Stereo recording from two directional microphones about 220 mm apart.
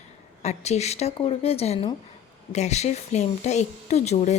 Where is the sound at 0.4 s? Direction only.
30° left (ahead or behind).